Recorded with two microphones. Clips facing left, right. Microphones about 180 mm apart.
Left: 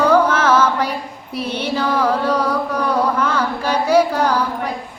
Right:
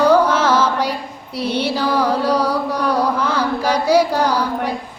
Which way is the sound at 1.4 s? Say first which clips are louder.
Right 2 dB; 10° right (ahead or behind).